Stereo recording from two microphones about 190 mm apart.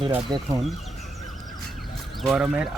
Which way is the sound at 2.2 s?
Centre (ahead or behind).